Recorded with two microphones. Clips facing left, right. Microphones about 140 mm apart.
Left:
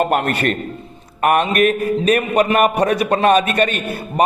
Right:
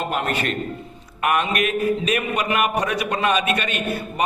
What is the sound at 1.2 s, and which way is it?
A man's voice, 45° left (ahead or behind).